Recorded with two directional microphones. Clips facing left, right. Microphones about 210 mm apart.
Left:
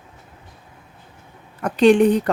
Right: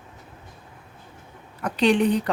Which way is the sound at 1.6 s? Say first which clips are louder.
Left 6 dB; 45° left (ahead or behind).